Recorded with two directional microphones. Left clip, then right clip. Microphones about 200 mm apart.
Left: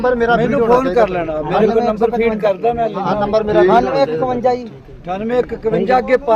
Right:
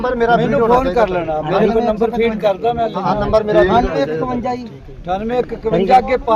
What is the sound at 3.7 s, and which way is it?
Speech, 45° left (ahead or behind).